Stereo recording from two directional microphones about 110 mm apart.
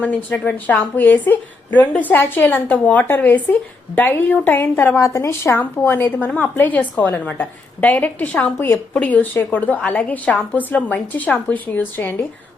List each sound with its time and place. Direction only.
0.0 s a woman's voice: 15° left (ahead or behind)